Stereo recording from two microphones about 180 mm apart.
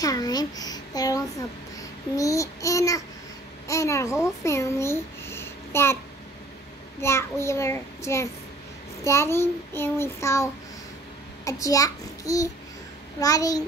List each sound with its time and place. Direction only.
0.0 s a child's voice: 20° left (ahead or behind)
1.8 s child singing: 20° left (ahead or behind)
3.6 s a child's voice: 15° left (ahead or behind)
7.0 s child singing: 15° left (ahead or behind)
11.4 s a child's voice: 20° left (ahead or behind)